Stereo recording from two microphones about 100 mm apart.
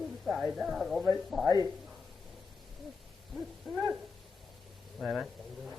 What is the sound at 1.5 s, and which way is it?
Speech, 35° left (ahead or behind).